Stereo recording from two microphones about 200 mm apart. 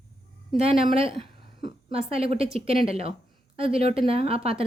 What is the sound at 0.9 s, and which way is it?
A woman's voice, 30° right (ahead or behind).